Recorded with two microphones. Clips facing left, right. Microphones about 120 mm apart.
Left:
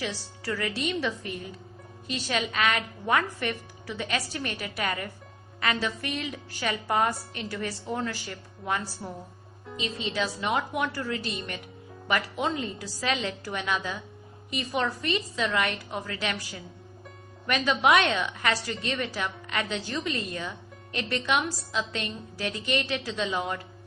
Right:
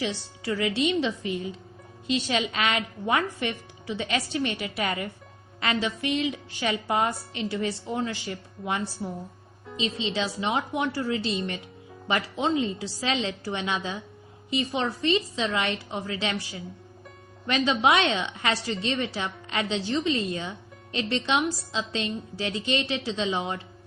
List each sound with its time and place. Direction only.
0.0 s a woman's voice: 20° right (ahead or behind)
10.1 s a woman's voice: 25° right (ahead or behind)